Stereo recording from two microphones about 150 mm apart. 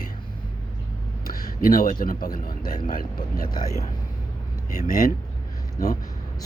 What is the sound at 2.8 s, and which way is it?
Speech, 70° left (ahead or behind).